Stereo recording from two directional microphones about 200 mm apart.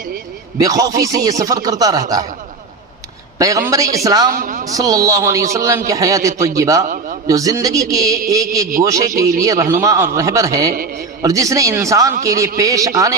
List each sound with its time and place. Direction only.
0.6 s speech: 20° right (ahead or behind)
3.3 s a man's voice: 15° right (ahead or behind)
4.3 s speech: 45° right (ahead or behind)
4.6 s speech: 15° right (ahead or behind)
6.8 s a man's voice: 40° right (ahead or behind)
7.3 s speech: 15° right (ahead or behind)